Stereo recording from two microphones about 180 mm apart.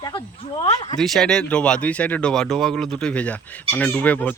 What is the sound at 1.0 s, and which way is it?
Speech, centre (ahead or behind).